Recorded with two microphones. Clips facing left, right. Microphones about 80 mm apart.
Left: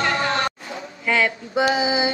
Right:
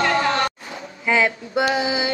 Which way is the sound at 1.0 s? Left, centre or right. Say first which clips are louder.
Right 2 dB; centre.